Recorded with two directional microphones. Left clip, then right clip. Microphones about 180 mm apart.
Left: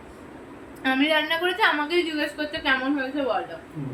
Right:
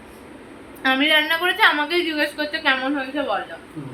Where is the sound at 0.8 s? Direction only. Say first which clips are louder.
Right 5 dB; 5° right (ahead or behind).